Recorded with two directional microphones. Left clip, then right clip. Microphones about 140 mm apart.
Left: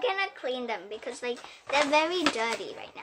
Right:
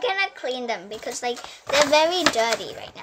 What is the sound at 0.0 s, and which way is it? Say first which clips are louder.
A child's voice: right 5 dB; 10° left (ahead or behind).